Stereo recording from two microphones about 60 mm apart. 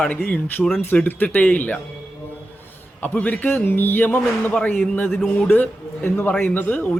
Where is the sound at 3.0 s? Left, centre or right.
Left.